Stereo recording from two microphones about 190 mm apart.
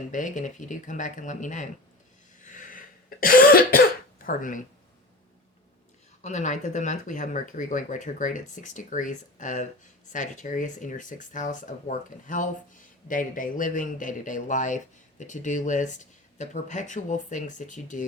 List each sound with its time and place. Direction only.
0.1 s speech: 40° left (ahead or behind)
2.4 s cough: 40° left (ahead or behind)
6.2 s speech: 40° left (ahead or behind)